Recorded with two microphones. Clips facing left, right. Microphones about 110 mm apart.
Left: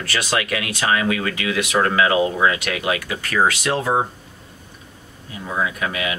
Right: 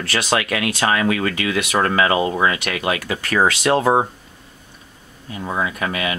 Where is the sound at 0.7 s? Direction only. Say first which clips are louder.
Right 1 dB; 40° right (ahead or behind).